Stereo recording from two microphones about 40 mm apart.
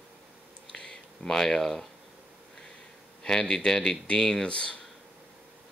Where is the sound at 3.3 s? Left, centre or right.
Centre.